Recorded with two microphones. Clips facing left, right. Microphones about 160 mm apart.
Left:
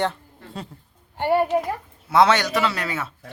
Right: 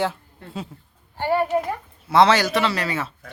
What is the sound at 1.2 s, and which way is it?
Speech, 15° left (ahead or behind).